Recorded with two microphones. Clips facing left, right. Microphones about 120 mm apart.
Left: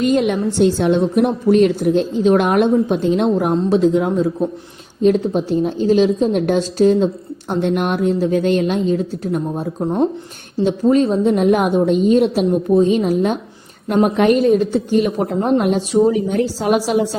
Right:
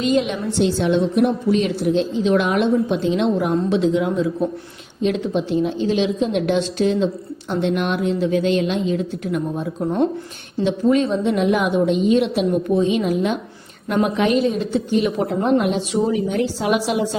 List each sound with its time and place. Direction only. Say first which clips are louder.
0.0 s a woman's voice: left 4 dB; 50° left (ahead or behind)